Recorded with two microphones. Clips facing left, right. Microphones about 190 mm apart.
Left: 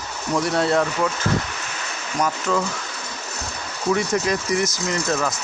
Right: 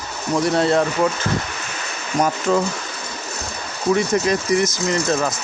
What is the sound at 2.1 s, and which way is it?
Speech, 25° right (ahead or behind).